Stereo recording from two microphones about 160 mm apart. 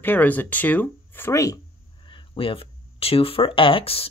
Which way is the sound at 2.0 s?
30° left (ahead or behind).